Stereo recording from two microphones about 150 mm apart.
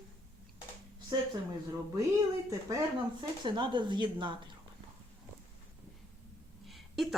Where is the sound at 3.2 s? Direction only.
30° right (ahead or behind).